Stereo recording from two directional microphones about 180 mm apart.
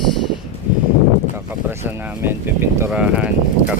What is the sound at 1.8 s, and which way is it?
Speech, 15° right (ahead or behind).